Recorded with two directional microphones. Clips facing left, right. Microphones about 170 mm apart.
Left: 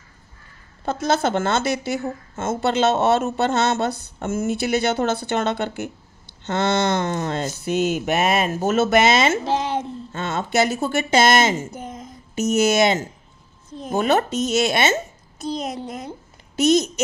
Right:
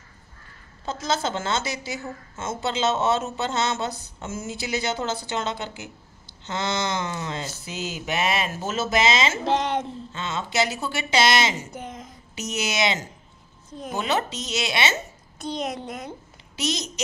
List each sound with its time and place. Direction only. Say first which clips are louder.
0.8 s a woman's voice: left 6 dB; 60° left (ahead or behind)
9.4 s speech: left 1 dB; 5° left (ahead or behind)
10.1 s speech: left 5 dB; 50° left (ahead or behind)
11.8 s a sound: left 3 dB; 45° left (ahead or behind)
13.8 s speech: left 6 dB; 50° left (ahead or behind)
15.3 s a sound: left 4 dB; 5° left (ahead or behind)
16.5 s speech: left 12 dB; 50° left (ahead or behind)